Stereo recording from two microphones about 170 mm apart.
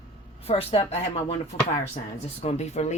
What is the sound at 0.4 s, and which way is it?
Speech, 40° left (ahead or behind).